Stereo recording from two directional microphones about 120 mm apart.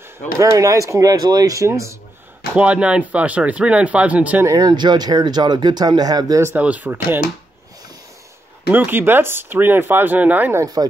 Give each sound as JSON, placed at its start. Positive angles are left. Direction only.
{"t": 0.4, "sound": "speech", "side_deg": -25}
{"t": 2.5, "sound": "speech", "side_deg": -10}
{"t": 4.5, "sound": "speech", "side_deg": -35}
{"t": 6.4, "sound": "speech", "side_deg": -15}
{"t": 8.6, "sound": "speech", "side_deg": -15}
{"t": 10.6, "sound": "speech", "side_deg": -30}